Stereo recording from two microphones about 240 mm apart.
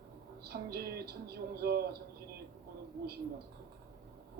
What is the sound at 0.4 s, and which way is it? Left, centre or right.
Speech, right.